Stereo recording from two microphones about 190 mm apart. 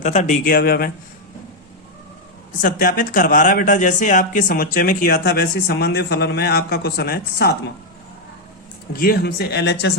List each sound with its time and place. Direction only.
0.0 s speech: 40° left (ahead or behind)
2.5 s speech: 45° left (ahead or behind)
8.9 s speech: 50° left (ahead or behind)